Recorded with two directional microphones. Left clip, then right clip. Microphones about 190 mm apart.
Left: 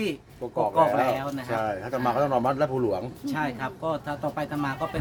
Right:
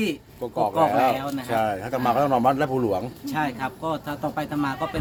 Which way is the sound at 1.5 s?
45° right (ahead or behind).